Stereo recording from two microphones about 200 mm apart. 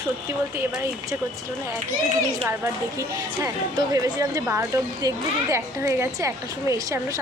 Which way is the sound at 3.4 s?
20° right (ahead or behind).